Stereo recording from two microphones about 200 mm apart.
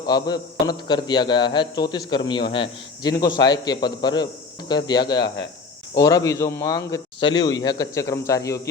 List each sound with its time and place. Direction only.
0.0 s a man's voice: 20° left (ahead or behind)